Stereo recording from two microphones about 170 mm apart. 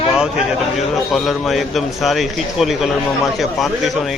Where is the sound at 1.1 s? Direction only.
Centre (ahead or behind).